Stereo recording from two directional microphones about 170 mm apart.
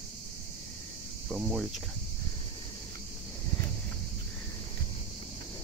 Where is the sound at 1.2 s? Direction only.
5° right (ahead or behind).